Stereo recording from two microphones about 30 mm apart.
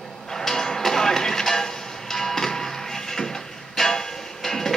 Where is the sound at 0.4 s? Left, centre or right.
Centre.